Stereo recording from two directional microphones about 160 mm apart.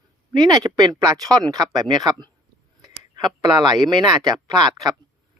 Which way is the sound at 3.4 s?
25° right (ahead or behind).